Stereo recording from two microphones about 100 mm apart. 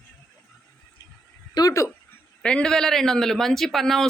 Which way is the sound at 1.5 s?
35° left (ahead or behind).